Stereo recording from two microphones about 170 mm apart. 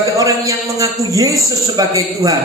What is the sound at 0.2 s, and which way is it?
A man's voice, 20° right (ahead or behind).